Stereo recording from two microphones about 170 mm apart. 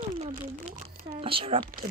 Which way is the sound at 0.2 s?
40° right (ahead or behind).